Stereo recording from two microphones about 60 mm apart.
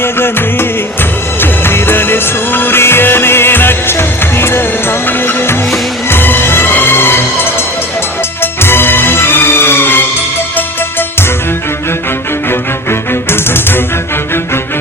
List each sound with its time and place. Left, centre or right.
0.0 s music: left
12.5 s music: left